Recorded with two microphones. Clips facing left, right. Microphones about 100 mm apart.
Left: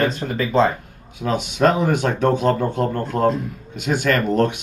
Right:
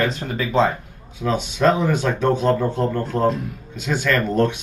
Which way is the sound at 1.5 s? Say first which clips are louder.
Left 1 dB; 50° left (ahead or behind).